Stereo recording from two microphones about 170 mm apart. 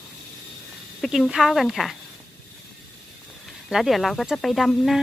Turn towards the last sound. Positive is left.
turn(degrees=0)  # may be behind; listen again after turning